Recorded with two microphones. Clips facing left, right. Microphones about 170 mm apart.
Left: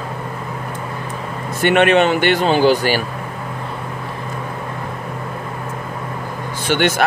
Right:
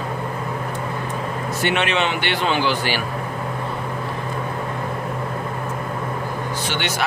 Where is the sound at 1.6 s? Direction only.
50° left (ahead or behind).